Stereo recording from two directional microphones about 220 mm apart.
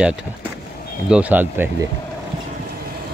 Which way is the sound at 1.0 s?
5° right (ahead or behind).